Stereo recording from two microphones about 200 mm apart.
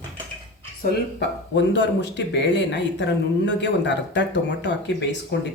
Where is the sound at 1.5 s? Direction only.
65° left (ahead or behind).